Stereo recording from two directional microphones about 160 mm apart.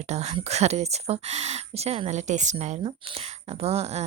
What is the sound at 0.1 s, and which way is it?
A woman's voice, 45° right (ahead or behind).